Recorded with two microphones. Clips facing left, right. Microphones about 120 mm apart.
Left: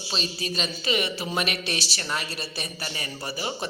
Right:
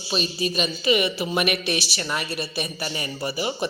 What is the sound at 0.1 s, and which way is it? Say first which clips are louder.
A man's voice: right 6 dB; 15° right (ahead or behind).